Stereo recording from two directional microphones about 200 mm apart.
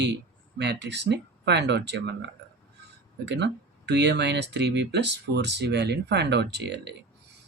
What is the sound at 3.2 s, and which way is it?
Speech, 60° right (ahead or behind).